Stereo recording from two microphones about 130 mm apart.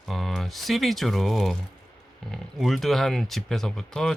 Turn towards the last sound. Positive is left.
turn(degrees=5)  # may be behind; listen again after turning